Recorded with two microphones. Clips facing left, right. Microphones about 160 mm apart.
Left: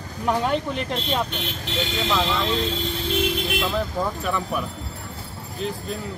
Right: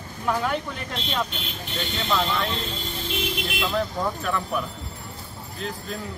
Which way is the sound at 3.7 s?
5° left (ahead or behind).